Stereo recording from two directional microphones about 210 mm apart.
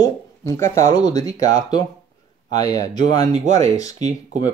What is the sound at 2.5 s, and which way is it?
Speech, 20° left (ahead or behind).